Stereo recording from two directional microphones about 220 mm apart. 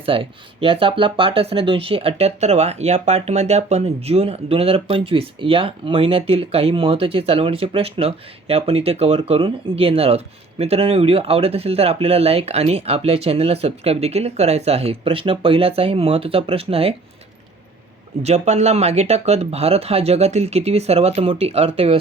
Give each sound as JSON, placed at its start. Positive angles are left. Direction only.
{"t": 0.0, "sound": "speech", "side_deg": -25}
{"t": 18.2, "sound": "speech", "side_deg": -30}